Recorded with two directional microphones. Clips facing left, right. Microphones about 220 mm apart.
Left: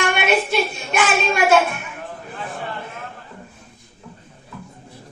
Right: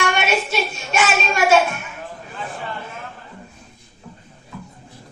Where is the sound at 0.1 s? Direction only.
55° left (ahead or behind).